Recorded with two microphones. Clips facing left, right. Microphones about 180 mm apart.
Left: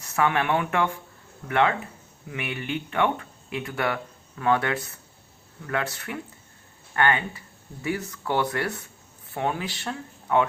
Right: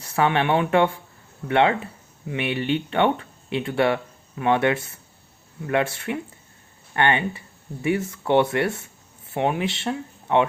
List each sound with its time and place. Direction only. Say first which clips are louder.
0.0 s speech: right 3 dB; 30° right (ahead or behind)